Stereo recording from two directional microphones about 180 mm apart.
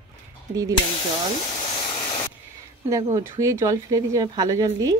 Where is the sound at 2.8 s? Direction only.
20° right (ahead or behind).